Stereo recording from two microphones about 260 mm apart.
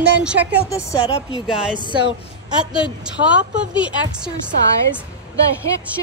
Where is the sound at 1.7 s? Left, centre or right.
Centre.